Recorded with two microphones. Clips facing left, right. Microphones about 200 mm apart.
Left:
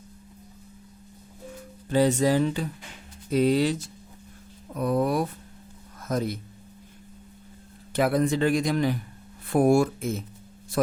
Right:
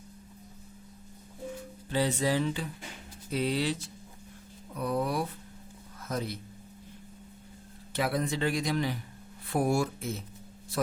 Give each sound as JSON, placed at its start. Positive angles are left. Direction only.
{"t": 1.9, "sound": "a man's voice", "side_deg": 45}
{"t": 7.9, "sound": "a man's voice", "side_deg": 50}